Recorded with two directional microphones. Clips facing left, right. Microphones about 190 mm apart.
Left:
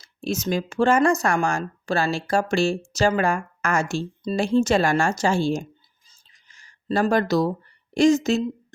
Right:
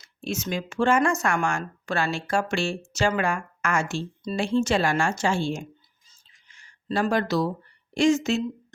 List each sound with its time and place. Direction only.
0.0 s speech: 40° left (ahead or behind)
6.5 s a sound: 40° left (ahead or behind)
7.9 s speech: 40° left (ahead or behind)